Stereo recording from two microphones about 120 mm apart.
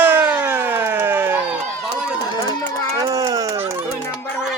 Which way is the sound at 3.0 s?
30° right (ahead or behind).